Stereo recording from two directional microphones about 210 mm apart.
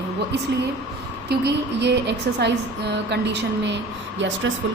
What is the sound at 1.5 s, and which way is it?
A woman's voice, 55° right (ahead or behind).